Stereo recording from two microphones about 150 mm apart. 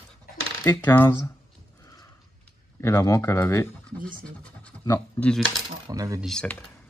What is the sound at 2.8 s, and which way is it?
Speech, 20° left (ahead or behind).